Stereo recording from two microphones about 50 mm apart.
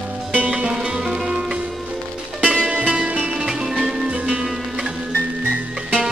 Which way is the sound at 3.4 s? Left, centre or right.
Centre.